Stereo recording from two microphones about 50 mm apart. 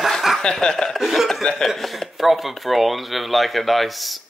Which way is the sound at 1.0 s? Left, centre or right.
Centre.